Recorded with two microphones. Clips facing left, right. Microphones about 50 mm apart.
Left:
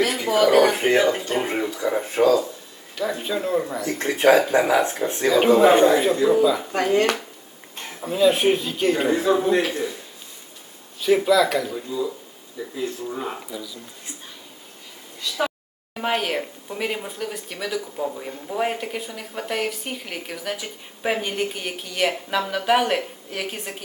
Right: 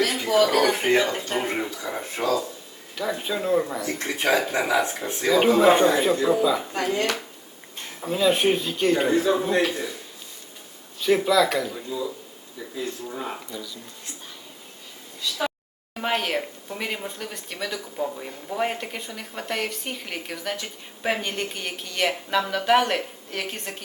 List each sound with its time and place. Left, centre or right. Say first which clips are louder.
0.2 s speech: left 4 dB; centre
0.8 s speech: left 3 dB; centre
2.1 s speech: left 7 dB; left
2.9 s speech: left 2 dB; centre
3.8 s speech: left 7 dB; left
5.3 s speech: left 2 dB; centre
6.7 s speech: left 5 dB; left
8.0 s speech: left 3 dB; centre
9.0 s speech: left 1 dB; left
11.0 s speech: left 2 dB; centre
13.1 s speech: left 3 dB; centre
16.0 s speech: left 1 dB; centre